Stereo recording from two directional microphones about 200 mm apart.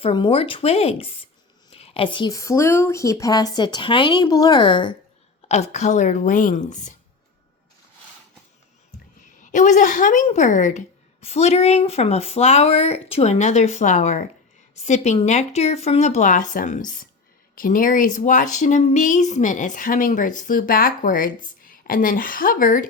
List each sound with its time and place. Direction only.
0.0 s a woman's voice: 25° left (ahead or behind)
9.4 s a woman's voice: 40° left (ahead or behind)